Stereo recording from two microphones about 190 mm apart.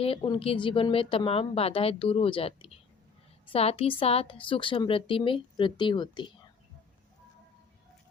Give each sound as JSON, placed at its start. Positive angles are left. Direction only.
{"t": 0.2, "sound": "speech", "side_deg": 25}